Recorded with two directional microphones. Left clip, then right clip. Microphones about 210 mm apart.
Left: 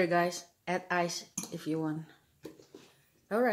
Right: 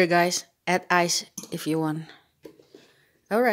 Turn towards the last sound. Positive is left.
turn(degrees=-40)  # may be behind; listen again after turning